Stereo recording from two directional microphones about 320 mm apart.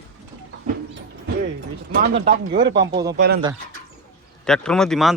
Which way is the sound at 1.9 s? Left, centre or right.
Right.